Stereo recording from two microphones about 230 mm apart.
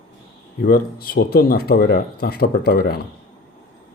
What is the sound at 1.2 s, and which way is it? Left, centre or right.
Speech, left.